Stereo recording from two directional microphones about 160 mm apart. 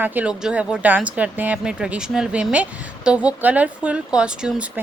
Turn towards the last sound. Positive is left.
turn(degrees=-10)  # may be behind; listen again after turning